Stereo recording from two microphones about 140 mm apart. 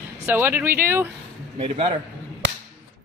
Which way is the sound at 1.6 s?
40° right (ahead or behind).